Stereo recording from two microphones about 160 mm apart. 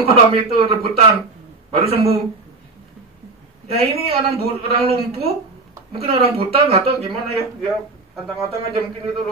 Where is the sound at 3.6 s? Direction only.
40° right (ahead or behind).